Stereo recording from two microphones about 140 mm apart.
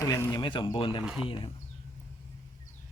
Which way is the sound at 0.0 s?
20° left (ahead or behind).